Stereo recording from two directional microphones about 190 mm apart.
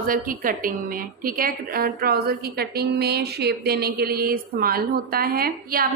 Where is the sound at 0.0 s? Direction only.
45° right (ahead or behind).